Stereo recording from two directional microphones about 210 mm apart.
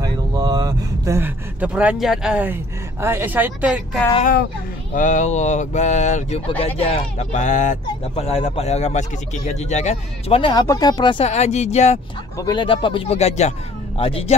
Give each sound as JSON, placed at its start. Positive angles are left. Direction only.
{"t": 0.0, "sound": "speech", "side_deg": -20}
{"t": 4.9, "sound": "speech", "side_deg": 35}
{"t": 12.4, "sound": "speech", "side_deg": 20}